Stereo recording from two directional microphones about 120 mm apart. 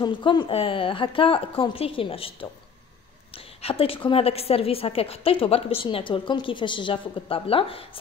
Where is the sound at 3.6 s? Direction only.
50° left (ahead or behind).